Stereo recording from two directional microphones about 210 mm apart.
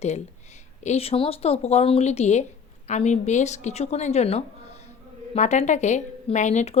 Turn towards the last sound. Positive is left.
turn(degrees=30)  # may be behind; listen again after turning